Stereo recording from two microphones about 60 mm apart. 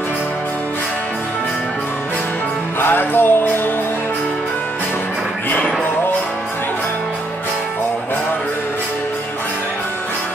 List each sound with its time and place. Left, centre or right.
2.8 s music: left